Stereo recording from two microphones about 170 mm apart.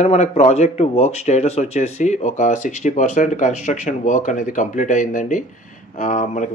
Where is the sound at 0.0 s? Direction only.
40° left (ahead or behind).